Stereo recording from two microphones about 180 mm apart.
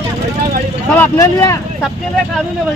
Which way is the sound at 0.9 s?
15° left (ahead or behind).